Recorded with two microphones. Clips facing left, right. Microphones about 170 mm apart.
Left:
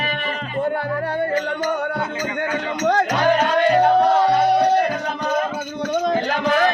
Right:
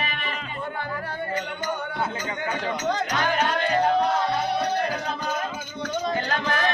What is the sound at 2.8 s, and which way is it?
Music, 70° left (ahead or behind).